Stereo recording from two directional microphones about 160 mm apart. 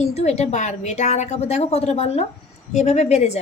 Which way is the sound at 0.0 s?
45° left (ahead or behind).